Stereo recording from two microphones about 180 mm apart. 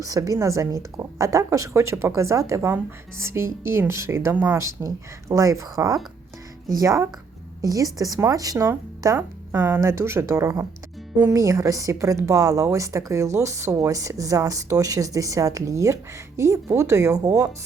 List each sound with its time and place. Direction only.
0.0 s a woman's voice: 20° right (ahead or behind)